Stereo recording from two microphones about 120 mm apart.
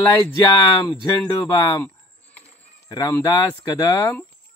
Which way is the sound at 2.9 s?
30° left (ahead or behind).